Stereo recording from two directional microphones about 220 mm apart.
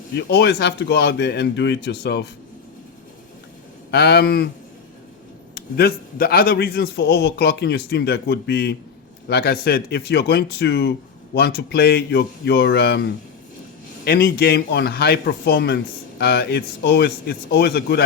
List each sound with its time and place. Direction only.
0.2 s a man's voice: 50° left (ahead or behind)
3.9 s a man's voice: 45° left (ahead or behind)
5.5 s a man's voice: 45° left (ahead or behind)